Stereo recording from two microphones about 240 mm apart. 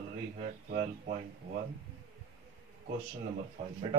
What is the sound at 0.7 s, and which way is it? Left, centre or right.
Speech, right.